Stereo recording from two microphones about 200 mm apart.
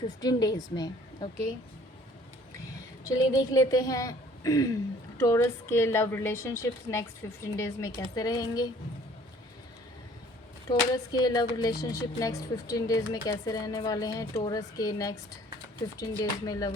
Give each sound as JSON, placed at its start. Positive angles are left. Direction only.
{"t": 0.2, "sound": "a woman's voice", "side_deg": 20}
{"t": 2.6, "sound": "a woman's voice", "side_deg": 15}
{"t": 10.7, "sound": "a woman's voice", "side_deg": 20}
{"t": 16.5, "sound": "a woman's voice", "side_deg": 20}